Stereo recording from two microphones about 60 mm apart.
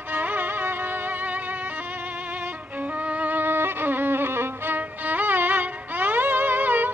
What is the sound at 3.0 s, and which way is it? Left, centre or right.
Music, right.